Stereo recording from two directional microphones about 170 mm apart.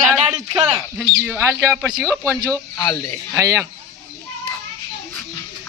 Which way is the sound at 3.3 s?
15° right (ahead or behind).